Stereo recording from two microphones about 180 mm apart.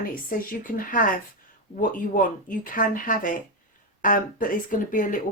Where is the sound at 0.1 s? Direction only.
55° left (ahead or behind).